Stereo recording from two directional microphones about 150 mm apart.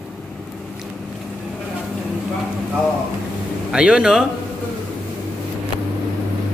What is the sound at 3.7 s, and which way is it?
Speech, 5° right (ahead or behind).